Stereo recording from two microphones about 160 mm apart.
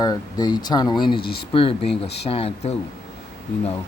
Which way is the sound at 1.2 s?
80° left.